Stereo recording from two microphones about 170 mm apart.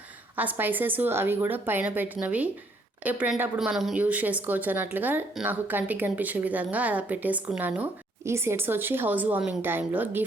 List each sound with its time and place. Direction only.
0.3 s speech: 10° right (ahead or behind)